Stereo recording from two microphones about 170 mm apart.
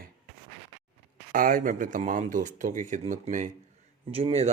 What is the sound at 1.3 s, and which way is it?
Speech, 55° right (ahead or behind).